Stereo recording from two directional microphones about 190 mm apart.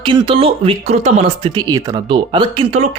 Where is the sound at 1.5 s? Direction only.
20° right (ahead or behind).